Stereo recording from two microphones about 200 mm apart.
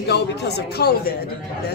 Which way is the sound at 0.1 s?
55° left (ahead or behind).